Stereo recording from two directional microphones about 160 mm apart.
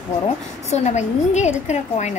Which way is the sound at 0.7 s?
45° left (ahead or behind).